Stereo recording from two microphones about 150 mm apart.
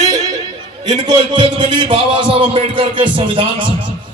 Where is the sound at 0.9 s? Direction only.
30° right (ahead or behind).